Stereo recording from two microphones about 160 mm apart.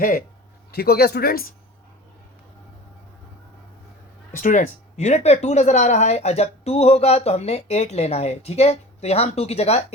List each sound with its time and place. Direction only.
0.7 s speech: 80° left
4.3 s speech: 55° left (ahead or behind)